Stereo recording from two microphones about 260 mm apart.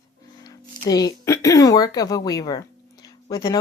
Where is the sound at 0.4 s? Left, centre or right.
Centre.